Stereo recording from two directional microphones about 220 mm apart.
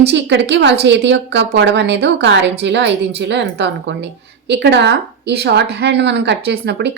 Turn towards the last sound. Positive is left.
turn(degrees=-50)  # may be behind; listen again after turning